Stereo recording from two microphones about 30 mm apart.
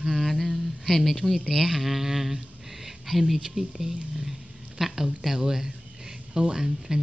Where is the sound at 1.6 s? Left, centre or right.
Centre.